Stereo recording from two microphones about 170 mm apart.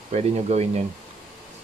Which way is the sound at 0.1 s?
40° right (ahead or behind).